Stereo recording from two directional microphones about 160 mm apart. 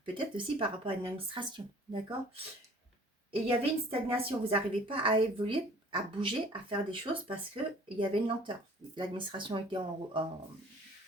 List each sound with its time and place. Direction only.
0.0 s a woman's voice: 30° right (ahead or behind)
3.4 s a woman's voice: 35° right (ahead or behind)